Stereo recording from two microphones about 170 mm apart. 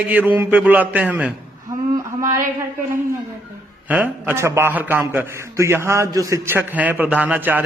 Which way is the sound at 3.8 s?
10° right (ahead or behind).